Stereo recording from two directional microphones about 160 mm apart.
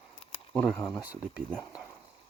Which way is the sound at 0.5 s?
10° left (ahead or behind).